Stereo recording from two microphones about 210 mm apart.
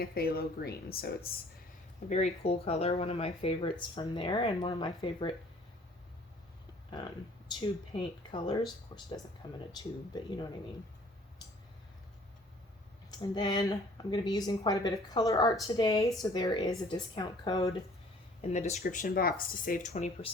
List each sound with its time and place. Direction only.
0.0 s speech: 45° left (ahead or behind)
2.0 s speech: 30° left (ahead or behind)
7.4 s speech: 20° left (ahead or behind)
13.1 s speech: 20° left (ahead or behind)
18.4 s speech: 30° left (ahead or behind)